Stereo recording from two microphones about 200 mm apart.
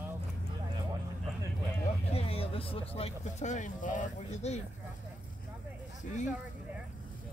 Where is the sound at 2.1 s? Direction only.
30° left (ahead or behind).